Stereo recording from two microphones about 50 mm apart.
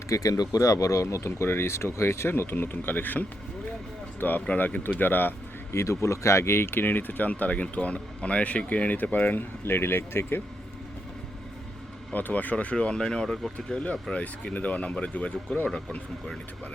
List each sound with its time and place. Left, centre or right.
0.1 s speech: left
5.7 s speech: left
9.6 s speech: left
12.1 s speech: left; by 13.3 s centre
13.8 s speech: left